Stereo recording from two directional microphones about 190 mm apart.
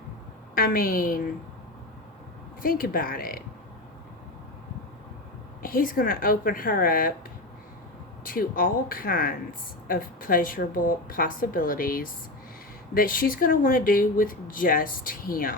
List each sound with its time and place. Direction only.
0.5 s speech: 50° left (ahead or behind)
2.6 s speech: 50° left (ahead or behind)
5.6 s speech: 50° left (ahead or behind)
8.2 s speech: 45° left (ahead or behind)